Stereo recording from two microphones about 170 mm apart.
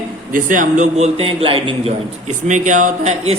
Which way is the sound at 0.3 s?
50° right (ahead or behind).